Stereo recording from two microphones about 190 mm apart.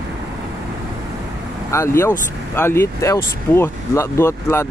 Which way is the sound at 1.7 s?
15° left (ahead or behind).